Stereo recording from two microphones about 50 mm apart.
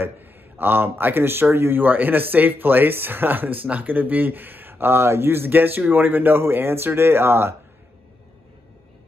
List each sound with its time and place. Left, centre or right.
0.0 s speech: right